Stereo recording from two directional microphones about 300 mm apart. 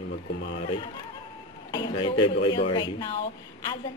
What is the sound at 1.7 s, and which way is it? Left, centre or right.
A woman's voice, centre.